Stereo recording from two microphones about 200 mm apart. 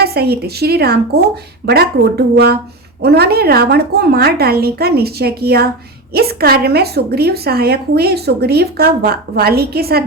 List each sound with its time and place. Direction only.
0.0 s a woman's voice: 50° right (ahead or behind)